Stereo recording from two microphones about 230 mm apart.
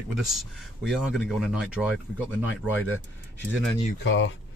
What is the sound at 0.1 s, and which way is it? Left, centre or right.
Speech, centre.